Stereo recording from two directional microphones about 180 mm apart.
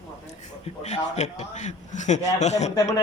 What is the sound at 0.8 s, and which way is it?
A man's voice, 40° left (ahead or behind).